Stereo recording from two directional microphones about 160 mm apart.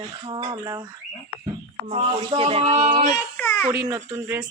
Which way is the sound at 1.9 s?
35° right (ahead or behind).